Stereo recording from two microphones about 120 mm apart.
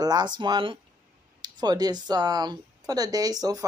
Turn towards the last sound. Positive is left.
turn(degrees=-30)  # may be behind; listen again after turning